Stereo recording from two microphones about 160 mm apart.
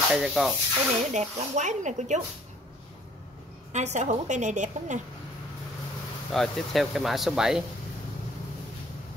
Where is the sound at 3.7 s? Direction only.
45° right (ahead or behind).